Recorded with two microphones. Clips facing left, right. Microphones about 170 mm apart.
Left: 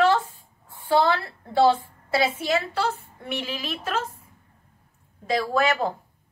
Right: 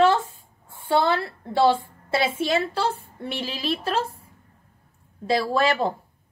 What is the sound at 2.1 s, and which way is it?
A woman's voice, 25° right (ahead or behind).